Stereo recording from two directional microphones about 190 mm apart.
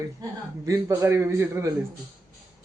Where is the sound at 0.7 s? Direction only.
15° right (ahead or behind).